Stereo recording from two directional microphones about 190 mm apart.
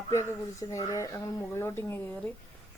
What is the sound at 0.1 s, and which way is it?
Speech, 15° left (ahead or behind).